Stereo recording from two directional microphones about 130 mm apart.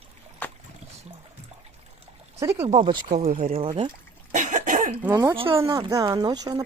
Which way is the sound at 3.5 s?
40° right (ahead or behind).